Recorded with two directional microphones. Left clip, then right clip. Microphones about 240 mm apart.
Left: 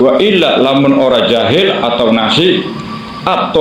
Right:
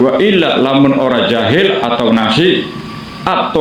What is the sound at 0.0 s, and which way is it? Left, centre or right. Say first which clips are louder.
A man's voice: left 2 dB; right.